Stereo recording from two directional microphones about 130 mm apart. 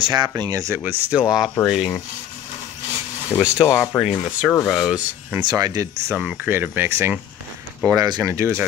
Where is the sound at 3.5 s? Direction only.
20° left (ahead or behind).